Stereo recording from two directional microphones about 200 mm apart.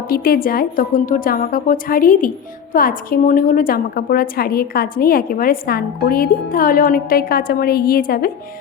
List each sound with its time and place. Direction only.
0.1 s a woman's voice: 45° left (ahead or behind)